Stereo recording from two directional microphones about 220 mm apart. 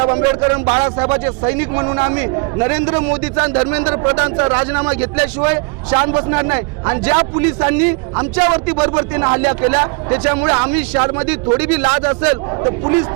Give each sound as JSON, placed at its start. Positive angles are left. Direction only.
{"t": 0.0, "sound": "a man's voice", "side_deg": -25}